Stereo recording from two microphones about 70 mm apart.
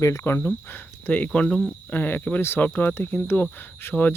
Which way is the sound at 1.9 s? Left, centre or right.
Left.